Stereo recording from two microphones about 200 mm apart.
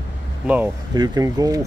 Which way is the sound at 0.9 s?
20° right (ahead or behind).